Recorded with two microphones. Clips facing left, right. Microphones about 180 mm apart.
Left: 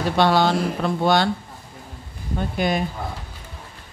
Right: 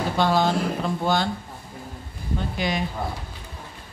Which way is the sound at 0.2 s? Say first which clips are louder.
Left 3 dB; 75° left (ahead or behind).